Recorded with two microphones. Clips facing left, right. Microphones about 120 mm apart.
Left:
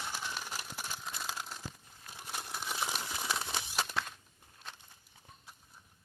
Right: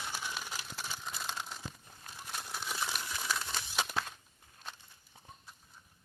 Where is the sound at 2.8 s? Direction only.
25° left (ahead or behind).